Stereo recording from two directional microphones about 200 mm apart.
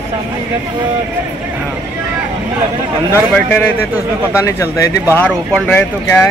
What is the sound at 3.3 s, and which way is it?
Speech, 10° left (ahead or behind).